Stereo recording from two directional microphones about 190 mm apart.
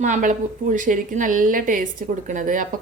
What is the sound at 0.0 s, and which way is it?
A woman's voice, 40° right (ahead or behind).